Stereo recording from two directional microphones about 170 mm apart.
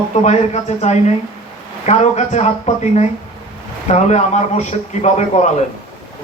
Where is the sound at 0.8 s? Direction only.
40° left (ahead or behind).